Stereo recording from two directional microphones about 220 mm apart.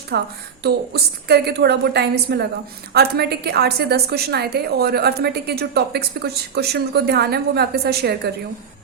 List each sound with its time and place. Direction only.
0.1 s a woman's voice: 50° right (ahead or behind)